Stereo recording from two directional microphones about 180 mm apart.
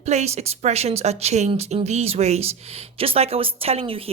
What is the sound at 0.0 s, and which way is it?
A woman's voice, 40° right (ahead or behind).